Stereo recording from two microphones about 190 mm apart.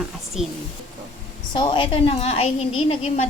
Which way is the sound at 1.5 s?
25° left (ahead or behind).